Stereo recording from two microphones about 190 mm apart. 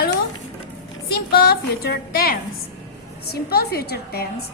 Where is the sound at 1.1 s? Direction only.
55° left (ahead or behind).